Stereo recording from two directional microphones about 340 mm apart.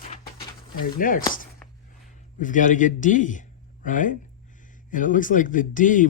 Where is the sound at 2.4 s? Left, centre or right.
Left.